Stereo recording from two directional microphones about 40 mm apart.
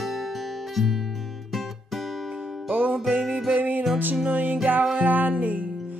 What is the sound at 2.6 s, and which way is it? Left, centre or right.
Music, right.